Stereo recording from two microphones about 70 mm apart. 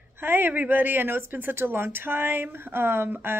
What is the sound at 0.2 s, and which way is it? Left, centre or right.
A man's voice, right.